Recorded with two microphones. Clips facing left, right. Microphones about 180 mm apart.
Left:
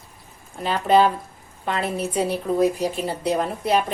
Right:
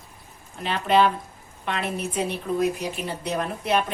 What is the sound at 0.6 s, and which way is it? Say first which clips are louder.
A woman's voice: left 3 dB; 40° left (ahead or behind).